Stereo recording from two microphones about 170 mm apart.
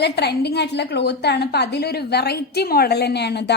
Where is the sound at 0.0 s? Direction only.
75° left (ahead or behind).